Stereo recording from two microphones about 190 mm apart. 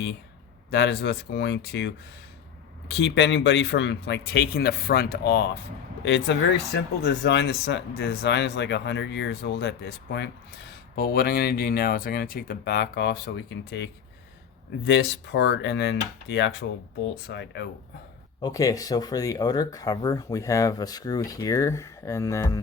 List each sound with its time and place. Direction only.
0.7 s speech: 65° left (ahead or behind)
2.9 s speech: 70° left (ahead or behind)
10.9 s speech: 55° left (ahead or behind)
18.4 s speech: 20° left (ahead or behind)